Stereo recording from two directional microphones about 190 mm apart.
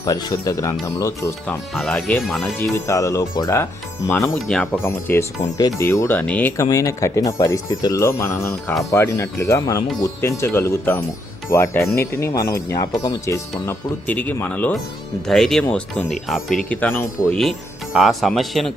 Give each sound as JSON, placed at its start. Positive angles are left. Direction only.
{"t": 0.0, "sound": "speech", "side_deg": 20}
{"t": 1.7, "sound": "speech", "side_deg": 5}
{"t": 4.1, "sound": "speech", "side_deg": 5}
{"t": 17.9, "sound": "speech", "side_deg": 0}